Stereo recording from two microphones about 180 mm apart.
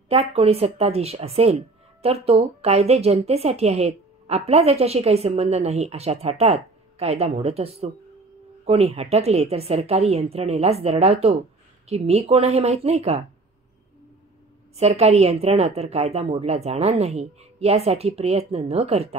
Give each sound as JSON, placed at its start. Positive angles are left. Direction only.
{"t": 0.1, "sound": "speech", "side_deg": -35}
{"t": 14.8, "sound": "speech", "side_deg": -35}